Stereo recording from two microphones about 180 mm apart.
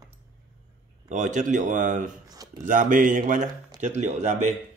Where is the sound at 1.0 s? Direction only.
45° right (ahead or behind).